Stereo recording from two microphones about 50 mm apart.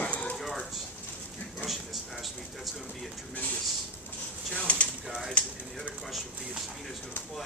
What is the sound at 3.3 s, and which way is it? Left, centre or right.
Speech, left.